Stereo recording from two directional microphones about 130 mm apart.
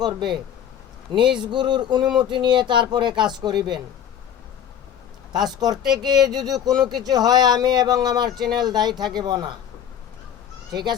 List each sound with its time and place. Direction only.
0.0 s speech: 35° right (ahead or behind)
5.3 s speech: 35° right (ahead or behind)
10.7 s speech: 35° right (ahead or behind)